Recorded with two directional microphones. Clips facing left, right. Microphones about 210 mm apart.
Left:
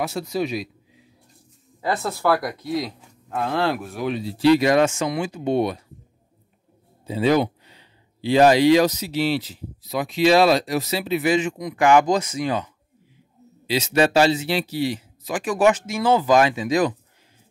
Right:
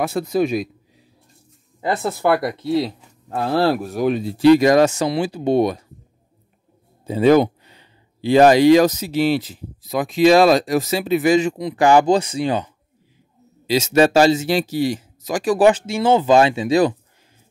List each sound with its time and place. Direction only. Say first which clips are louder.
0.0 s speech: right 5 dB; 50° right (ahead or behind)
1.8 s speech: right 3 dB; 20° right (ahead or behind); by 5.8 s 40° right (ahead or behind)
7.1 s speech: right 6 dB; 50° right (ahead or behind); by 12.7 s 30° right (ahead or behind)
13.7 s speech: right 4 dB; 45° right (ahead or behind)